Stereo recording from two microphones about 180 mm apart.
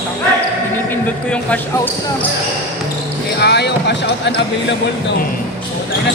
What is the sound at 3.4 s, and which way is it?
Speech, 70° left (ahead or behind).